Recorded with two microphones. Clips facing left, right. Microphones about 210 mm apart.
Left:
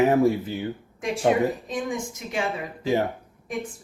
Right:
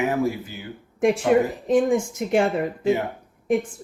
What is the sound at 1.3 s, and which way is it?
A woman's voice, 50° right (ahead or behind).